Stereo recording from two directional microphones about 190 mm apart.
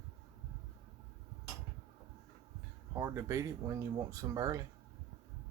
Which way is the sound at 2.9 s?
15° right (ahead or behind).